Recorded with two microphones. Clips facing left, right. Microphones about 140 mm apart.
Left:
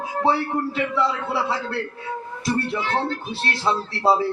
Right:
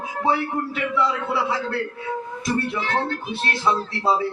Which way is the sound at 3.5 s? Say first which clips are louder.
Right 1 dB; 30° left (ahead or behind).